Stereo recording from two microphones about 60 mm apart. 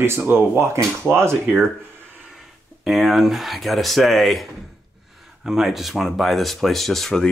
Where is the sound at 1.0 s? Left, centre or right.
Right.